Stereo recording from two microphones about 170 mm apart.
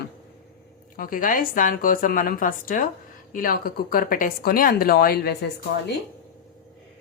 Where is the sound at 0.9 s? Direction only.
55° left (ahead or behind); by 5.5 s 70° left (ahead or behind).